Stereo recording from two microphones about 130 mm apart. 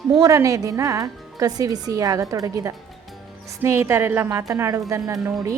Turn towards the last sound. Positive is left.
turn(degrees=-25)  # may be behind; listen again after turning